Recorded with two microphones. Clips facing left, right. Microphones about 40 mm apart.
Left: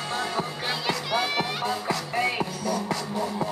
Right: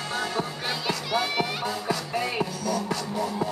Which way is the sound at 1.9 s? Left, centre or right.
Centre.